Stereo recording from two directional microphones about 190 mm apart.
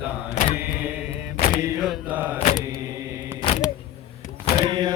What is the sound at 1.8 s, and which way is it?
Mantra, 5° right (ahead or behind).